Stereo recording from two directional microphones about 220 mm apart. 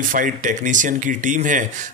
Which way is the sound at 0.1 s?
35° right (ahead or behind).